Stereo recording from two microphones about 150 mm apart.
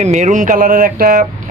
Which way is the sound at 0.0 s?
50° right (ahead or behind).